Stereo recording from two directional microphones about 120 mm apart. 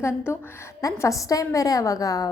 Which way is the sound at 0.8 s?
25° left (ahead or behind).